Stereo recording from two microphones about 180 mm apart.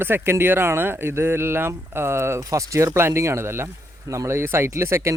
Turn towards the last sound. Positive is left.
turn(degrees=-15)  # may be behind; listen again after turning